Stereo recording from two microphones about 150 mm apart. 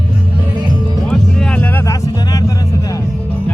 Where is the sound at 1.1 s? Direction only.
5° left (ahead or behind); by 3.0 s 20° left (ahead or behind).